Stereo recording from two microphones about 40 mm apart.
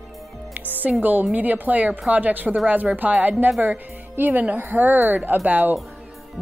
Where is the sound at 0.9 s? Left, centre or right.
Right.